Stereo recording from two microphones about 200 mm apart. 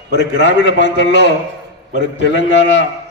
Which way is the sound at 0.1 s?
60° left (ahead or behind).